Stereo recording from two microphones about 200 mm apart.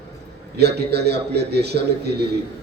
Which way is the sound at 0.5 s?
55° right (ahead or behind).